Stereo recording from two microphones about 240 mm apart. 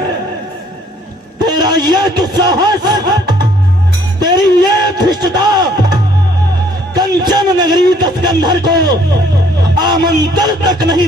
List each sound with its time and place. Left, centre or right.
1.4 s a man's voice: centre
4.2 s music: centre
6.9 s a man's voice: centre